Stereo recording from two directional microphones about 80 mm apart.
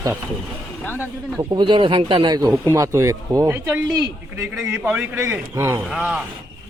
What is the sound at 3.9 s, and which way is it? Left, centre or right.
Speech, right.